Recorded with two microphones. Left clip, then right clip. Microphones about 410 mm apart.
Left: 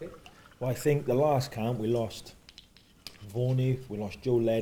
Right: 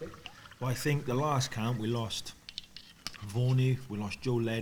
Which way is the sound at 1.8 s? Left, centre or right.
Right.